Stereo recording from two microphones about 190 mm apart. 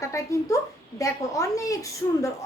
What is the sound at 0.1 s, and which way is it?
A woman's voice, 15° left (ahead or behind).